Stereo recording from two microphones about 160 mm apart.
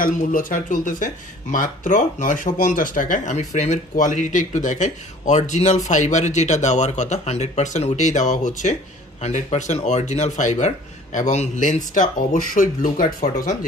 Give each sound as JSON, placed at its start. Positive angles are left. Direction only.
{"t": 0.0, "sound": "speech", "side_deg": 60}